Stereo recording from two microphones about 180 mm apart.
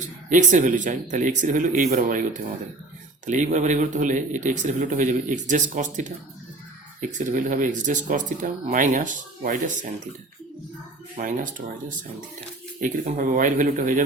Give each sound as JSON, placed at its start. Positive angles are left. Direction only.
{"t": 0.3, "sound": "speech", "side_deg": -45}
{"t": 7.1, "sound": "speech", "side_deg": -45}
{"t": 11.2, "sound": "speech", "side_deg": -45}